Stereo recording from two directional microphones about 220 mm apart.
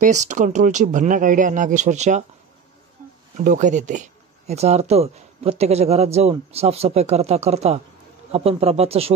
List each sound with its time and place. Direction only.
0.0 s speech: 35° right (ahead or behind)
3.3 s a man's voice: 35° right (ahead or behind)